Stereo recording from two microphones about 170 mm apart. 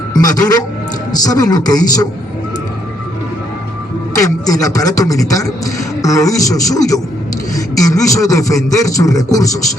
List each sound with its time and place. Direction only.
0.1 s a man's voice: 20° left (ahead or behind)
4.2 s a man's voice: 20° left (ahead or behind)